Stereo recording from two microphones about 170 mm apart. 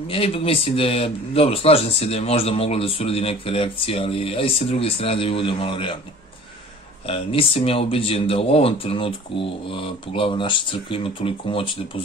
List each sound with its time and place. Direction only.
0.1 s a man's voice: 35° left (ahead or behind)
7.1 s a man's voice: 35° left (ahead or behind)